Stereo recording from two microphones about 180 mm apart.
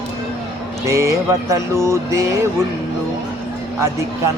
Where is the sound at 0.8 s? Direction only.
15° right (ahead or behind).